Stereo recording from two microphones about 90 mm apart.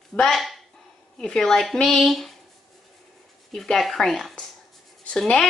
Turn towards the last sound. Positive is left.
turn(degrees=5)  # may be behind; listen again after turning